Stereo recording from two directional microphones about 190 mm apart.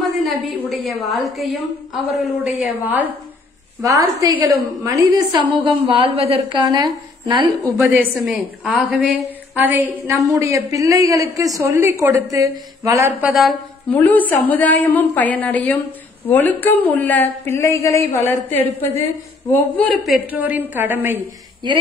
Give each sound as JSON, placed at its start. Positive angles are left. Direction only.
{"t": 0.0, "sound": "a sound", "side_deg": 0}
{"t": 2.1, "sound": "a woman's voice", "side_deg": -5}
{"t": 13.3, "sound": "a woman's voice", "side_deg": 0}
{"t": 20.0, "sound": "a woman's voice", "side_deg": -5}